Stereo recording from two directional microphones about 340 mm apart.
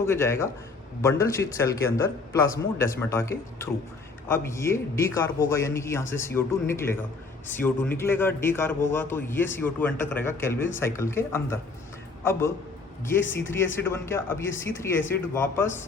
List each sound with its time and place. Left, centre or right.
0.0 s a man's voice: centre